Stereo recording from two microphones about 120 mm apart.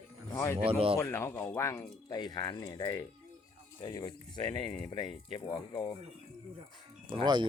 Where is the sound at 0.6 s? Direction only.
50° right (ahead or behind).